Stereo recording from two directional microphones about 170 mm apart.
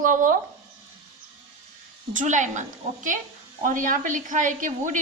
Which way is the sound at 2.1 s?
45° right (ahead or behind).